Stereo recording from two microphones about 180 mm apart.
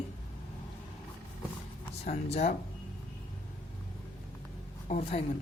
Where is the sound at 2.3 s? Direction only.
40° left (ahead or behind).